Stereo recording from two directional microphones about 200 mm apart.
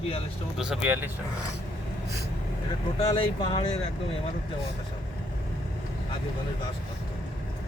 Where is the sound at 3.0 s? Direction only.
25° left (ahead or behind).